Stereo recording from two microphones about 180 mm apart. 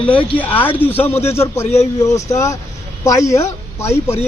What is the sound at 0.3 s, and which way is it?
A man's voice, 10° left (ahead or behind).